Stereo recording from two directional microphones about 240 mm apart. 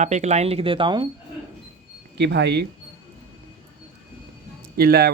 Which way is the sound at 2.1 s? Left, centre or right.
Right.